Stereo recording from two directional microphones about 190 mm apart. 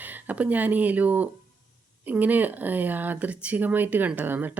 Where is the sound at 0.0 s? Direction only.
10° right (ahead or behind).